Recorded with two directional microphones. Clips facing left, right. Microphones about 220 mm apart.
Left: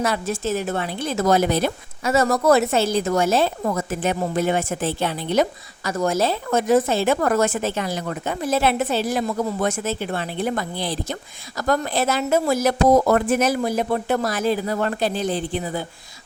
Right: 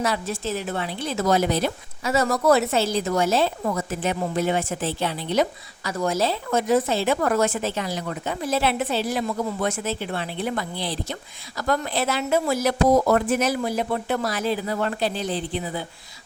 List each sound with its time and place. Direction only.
0.0 s a woman's voice: 50° left (ahead or behind)